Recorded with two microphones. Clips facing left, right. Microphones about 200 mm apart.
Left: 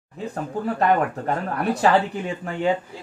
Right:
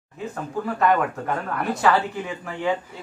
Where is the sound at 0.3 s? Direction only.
35° left (ahead or behind).